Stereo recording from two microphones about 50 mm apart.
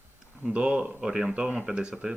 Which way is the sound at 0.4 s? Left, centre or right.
Right.